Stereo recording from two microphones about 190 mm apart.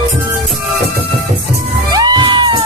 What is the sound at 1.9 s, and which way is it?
Music, 20° right (ahead or behind).